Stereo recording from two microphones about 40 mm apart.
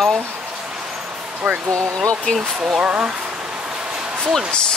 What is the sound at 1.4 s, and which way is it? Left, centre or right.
Speech, right.